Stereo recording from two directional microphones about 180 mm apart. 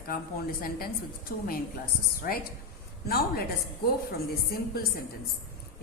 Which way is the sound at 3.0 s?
60° left (ahead or behind).